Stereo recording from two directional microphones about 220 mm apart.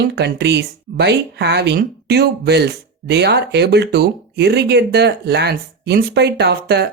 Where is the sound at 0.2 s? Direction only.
50° right (ahead or behind).